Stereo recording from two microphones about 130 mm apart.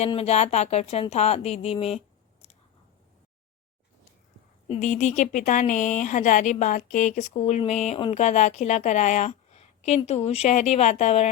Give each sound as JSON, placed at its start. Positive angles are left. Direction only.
{"t": 0.2, "sound": "speech", "side_deg": 60}
{"t": 4.8, "sound": "a woman's voice", "side_deg": 70}